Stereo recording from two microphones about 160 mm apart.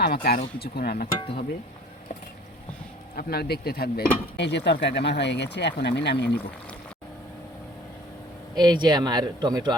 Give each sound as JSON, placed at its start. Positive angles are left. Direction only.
{"t": 0.0, "sound": "speech", "side_deg": 80}
{"t": 3.2, "sound": "speech", "side_deg": 75}
{"t": 8.5, "sound": "speech", "side_deg": -25}